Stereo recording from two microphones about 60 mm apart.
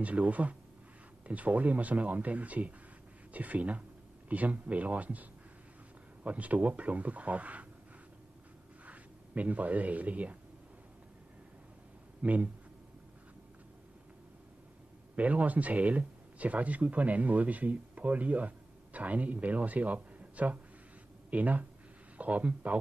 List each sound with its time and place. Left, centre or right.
0.0 s speech: right
6.2 s speech: right
8.8 s speech: right
12.2 s speech: right
15.1 s speech: right